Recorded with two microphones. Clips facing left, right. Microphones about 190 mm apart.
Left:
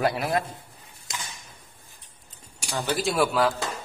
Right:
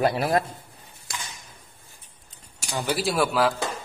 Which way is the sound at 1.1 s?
20° left (ahead or behind).